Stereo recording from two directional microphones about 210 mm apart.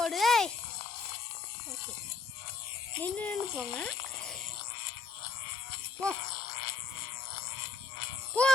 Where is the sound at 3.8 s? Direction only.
5° left (ahead or behind).